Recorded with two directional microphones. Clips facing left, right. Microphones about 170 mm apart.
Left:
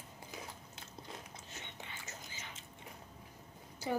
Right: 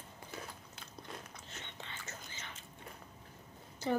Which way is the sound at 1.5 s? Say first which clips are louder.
Right 1 dB; 15° left (ahead or behind).